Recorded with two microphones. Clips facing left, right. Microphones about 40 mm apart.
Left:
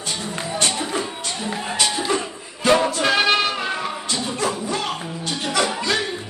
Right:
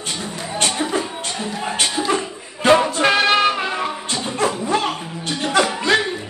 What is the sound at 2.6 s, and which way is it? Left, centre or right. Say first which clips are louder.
Music: right 3 dB; right.